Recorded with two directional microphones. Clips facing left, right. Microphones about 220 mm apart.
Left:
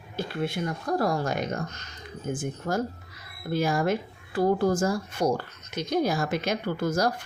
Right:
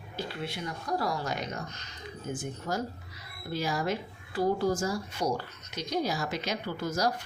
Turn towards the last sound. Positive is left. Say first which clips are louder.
# left 5 dB
turn(degrees=50)  # may be behind; listen again after turning